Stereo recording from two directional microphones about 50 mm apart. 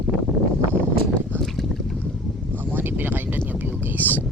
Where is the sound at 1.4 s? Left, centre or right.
Centre.